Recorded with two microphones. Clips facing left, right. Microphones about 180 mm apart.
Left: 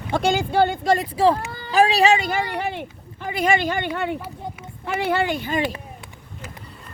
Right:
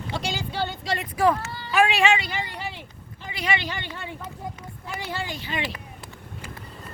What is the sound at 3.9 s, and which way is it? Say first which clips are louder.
Speech: left 10 dB; 65° left (ahead or behind).